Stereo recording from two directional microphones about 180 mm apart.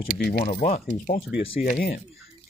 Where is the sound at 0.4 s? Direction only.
45° left (ahead or behind).